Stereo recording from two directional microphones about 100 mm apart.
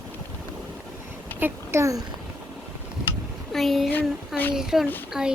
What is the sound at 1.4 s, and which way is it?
Speech, 25° right (ahead or behind).